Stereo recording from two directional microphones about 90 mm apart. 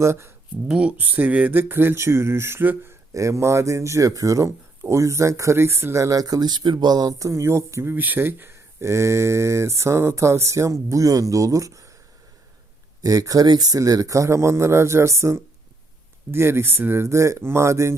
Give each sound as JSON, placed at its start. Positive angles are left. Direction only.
{"t": 0.0, "sound": "speech", "side_deg": -30}
{"t": 0.7, "sound": "speech", "side_deg": -15}
{"t": 3.1, "sound": "speech", "side_deg": -35}
{"t": 13.0, "sound": "speech", "side_deg": -40}